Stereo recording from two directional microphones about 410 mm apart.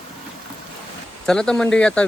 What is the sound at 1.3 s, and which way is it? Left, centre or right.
Speech, centre.